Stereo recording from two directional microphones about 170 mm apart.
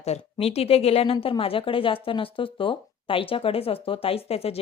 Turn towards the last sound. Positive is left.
turn(degrees=35)  # may be behind; listen again after turning